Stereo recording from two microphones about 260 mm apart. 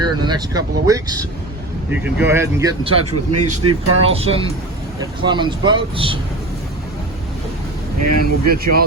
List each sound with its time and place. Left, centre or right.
0.0 s speech: centre
3.1 s a man's voice: right
3.7 s speech: right
8.0 s speech: right
8.5 s speech: right